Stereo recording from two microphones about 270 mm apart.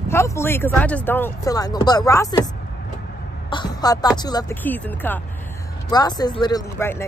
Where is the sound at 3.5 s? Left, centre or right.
Centre.